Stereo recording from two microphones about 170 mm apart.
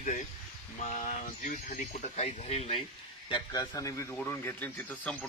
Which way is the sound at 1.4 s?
45° left (ahead or behind).